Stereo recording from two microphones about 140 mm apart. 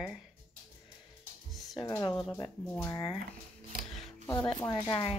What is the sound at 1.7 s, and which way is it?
Speech, 30° left (ahead or behind).